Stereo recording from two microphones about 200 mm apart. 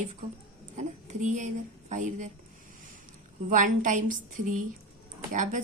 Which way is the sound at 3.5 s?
40° right (ahead or behind).